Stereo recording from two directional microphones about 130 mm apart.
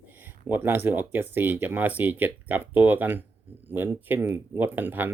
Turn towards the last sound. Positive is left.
turn(degrees=-15)  # may be behind; listen again after turning